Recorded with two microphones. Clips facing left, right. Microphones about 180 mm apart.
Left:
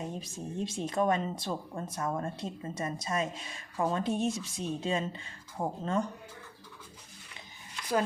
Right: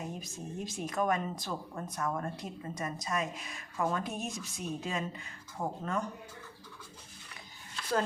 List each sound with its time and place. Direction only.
0.0 s speech: 30° left (ahead or behind)